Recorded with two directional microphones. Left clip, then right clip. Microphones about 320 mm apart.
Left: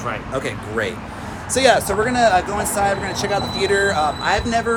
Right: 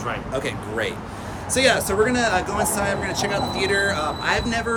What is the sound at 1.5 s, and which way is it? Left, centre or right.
Speech, centre.